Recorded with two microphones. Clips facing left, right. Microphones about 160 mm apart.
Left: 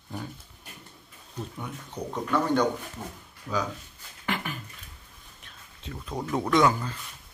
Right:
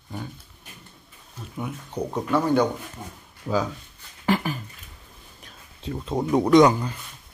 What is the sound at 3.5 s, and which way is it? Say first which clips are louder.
Speech: right 6 dB; 40° right (ahead or behind).